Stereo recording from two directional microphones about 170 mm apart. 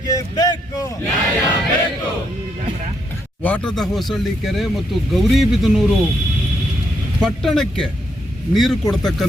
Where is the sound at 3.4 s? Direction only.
10° left (ahead or behind).